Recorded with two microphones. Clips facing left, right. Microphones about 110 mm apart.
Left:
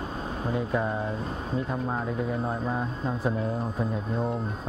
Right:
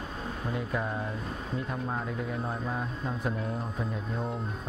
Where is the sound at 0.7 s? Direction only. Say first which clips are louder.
Left 5 dB; 5° left (ahead or behind).